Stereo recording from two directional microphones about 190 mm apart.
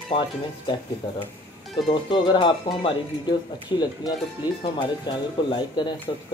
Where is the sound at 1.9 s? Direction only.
25° left (ahead or behind).